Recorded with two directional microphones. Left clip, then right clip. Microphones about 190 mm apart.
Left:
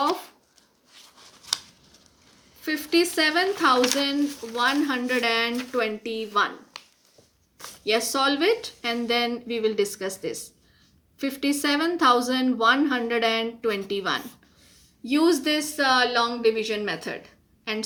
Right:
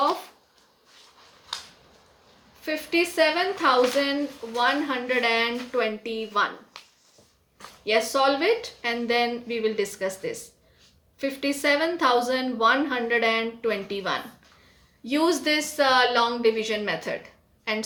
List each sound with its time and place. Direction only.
2.6 s speech: 30° left (ahead or behind)
7.9 s speech: 30° left (ahead or behind)